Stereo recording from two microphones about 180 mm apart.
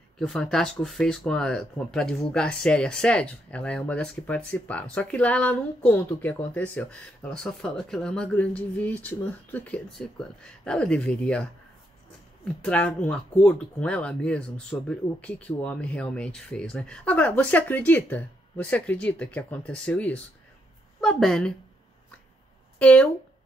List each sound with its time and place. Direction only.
0.2 s speech: 5° left (ahead or behind)
12.6 s speech: 5° left (ahead or behind)
22.8 s speech: 10° left (ahead or behind)